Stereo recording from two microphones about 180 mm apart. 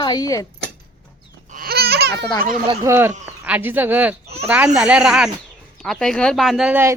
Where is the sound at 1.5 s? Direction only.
60° right (ahead or behind).